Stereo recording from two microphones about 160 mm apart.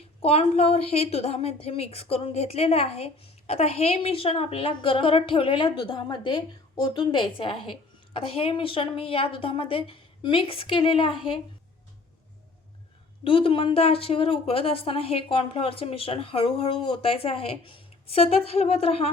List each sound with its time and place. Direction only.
0.2 s a woman's voice: 40° left (ahead or behind)
13.2 s a woman's voice: 35° left (ahead or behind)